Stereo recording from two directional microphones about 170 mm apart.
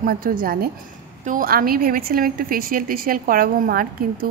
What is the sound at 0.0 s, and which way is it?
A woman's voice, 55° right (ahead or behind).